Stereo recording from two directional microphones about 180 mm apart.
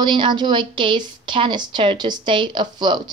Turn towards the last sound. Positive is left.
turn(degrees=-25)  # may be behind; listen again after turning